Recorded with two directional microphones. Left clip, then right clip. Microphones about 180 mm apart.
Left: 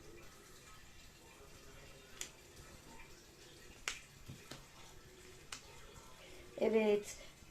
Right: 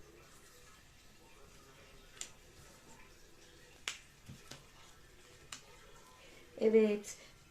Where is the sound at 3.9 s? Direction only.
5° right (ahead or behind).